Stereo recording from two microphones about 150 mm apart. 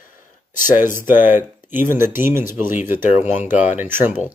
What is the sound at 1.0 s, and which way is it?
Speech, 15° right (ahead or behind).